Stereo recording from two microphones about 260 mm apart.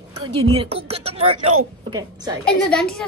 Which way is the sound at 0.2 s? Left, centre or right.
Right.